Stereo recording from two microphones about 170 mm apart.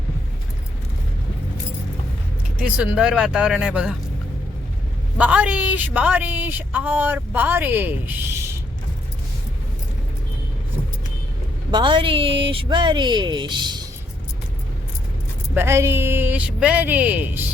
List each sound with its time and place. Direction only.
2.6 s speech: 5° right (ahead or behind)
5.1 s a woman's voice: 10° right (ahead or behind)
11.7 s speech: 30° right (ahead or behind)
15.5 s a woman's voice: 15° right (ahead or behind)